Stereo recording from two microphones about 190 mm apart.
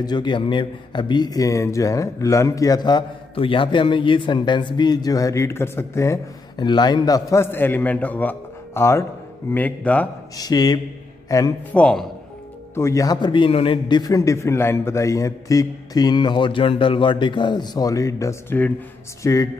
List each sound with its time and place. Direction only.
0.0 s a man's voice: 25° left (ahead or behind)
10.3 s a man's voice: 20° left (ahead or behind)
11.7 s speech: 5° left (ahead or behind)
12.7 s a man's voice: 15° left (ahead or behind)